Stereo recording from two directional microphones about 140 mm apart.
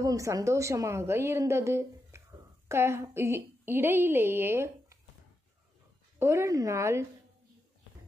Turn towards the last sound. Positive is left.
turn(degrees=-20)  # may be behind; listen again after turning